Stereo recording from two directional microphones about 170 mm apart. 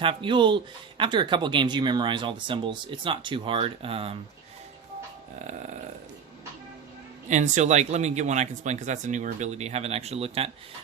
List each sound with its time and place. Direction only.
0.0 s speech: 30° right (ahead or behind)
7.3 s speech: 45° right (ahead or behind)